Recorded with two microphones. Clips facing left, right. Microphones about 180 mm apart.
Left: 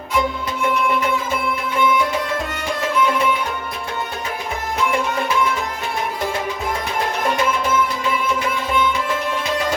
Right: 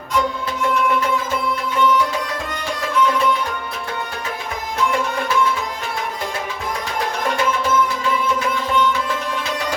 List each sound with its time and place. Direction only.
1.8 s music: 10° left (ahead or behind)